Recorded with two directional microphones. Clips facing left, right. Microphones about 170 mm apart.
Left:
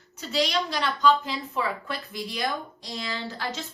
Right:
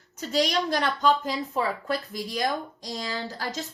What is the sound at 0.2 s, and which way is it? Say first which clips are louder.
A woman's voice: right 1 dB; 45° right (ahead or behind).